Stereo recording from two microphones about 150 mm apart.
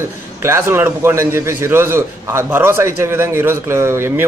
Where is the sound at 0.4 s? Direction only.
20° right (ahead or behind).